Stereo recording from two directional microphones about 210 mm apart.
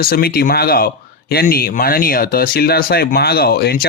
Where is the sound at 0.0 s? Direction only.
45° left (ahead or behind).